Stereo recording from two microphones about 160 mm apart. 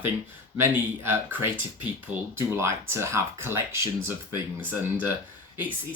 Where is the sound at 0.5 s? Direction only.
15° right (ahead or behind).